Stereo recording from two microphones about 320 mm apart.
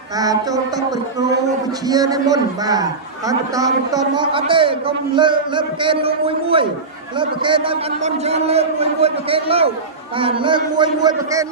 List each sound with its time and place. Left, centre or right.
0.2 s a man's voice: centre
1.9 s a man's voice: centre